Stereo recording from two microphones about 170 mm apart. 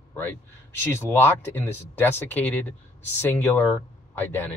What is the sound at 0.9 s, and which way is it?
Speech, 15° left (ahead or behind).